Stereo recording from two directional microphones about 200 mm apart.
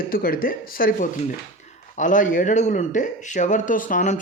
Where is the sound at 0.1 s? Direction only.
45° left (ahead or behind).